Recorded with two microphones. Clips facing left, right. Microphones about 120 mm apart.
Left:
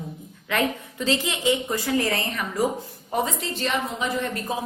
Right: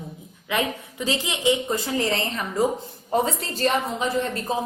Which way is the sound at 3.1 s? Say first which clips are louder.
Right 2 dB; 35° right (ahead or behind).